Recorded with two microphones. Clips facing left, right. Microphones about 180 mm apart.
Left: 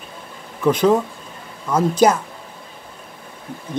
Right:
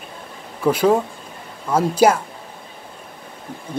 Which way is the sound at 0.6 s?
10° right (ahead or behind).